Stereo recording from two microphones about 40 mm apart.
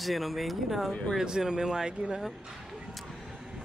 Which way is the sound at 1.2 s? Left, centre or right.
Centre.